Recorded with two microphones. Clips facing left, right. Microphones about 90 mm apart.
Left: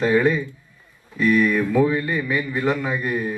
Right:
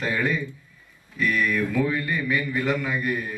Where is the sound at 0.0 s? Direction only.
30° left (ahead or behind).